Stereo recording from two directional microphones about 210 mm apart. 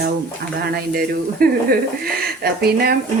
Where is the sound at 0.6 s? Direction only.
45° right (ahead or behind).